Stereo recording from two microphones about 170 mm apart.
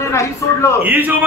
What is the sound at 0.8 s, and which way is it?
Speech, 10° right (ahead or behind).